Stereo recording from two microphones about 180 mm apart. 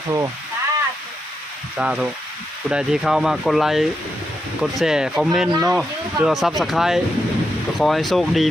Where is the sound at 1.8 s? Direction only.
5° right (ahead or behind).